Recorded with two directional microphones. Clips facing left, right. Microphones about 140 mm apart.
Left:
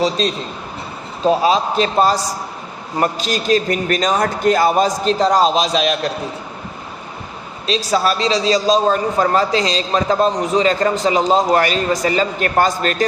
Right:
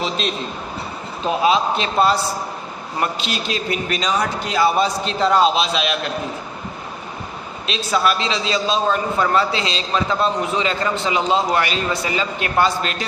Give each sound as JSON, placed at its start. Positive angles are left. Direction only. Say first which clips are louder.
{"t": 0.2, "sound": "a man's voice", "louder": "left 4 dB", "side_deg": 40}
{"t": 7.9, "sound": "a man's voice", "louder": "left 2 dB", "side_deg": 40}